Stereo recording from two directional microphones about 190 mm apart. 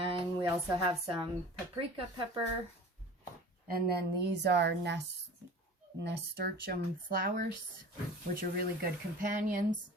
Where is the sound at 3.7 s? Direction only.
55° right (ahead or behind).